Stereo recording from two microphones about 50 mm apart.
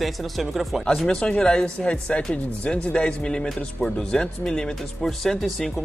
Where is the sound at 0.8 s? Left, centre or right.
Centre.